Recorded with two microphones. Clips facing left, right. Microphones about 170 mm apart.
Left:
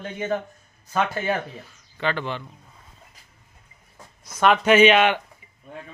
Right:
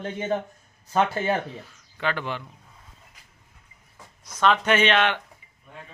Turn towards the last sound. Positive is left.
turn(degrees=10)  # may be behind; listen again after turning